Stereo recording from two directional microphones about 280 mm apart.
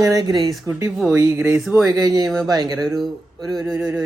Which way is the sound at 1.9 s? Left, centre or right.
Centre.